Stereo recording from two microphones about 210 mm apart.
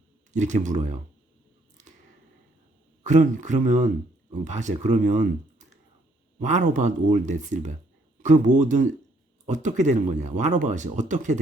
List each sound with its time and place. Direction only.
0.3 s speech: 35° right (ahead or behind)
1.8 s a sound: 35° right (ahead or behind)
3.0 s speech: 35° right (ahead or behind)